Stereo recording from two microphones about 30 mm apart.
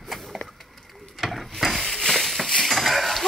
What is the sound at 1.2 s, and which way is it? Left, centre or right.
Mechanisms, centre.